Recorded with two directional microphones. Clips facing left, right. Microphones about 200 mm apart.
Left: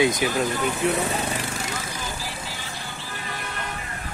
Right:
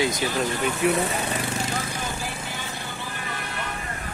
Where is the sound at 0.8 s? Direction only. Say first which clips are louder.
Right 2 dB; 10° right (ahead or behind).